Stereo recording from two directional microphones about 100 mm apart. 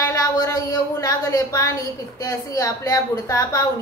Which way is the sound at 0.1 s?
40° left (ahead or behind).